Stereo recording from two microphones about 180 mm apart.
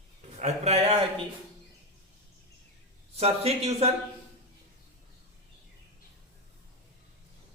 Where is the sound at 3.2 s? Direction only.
35° right (ahead or behind).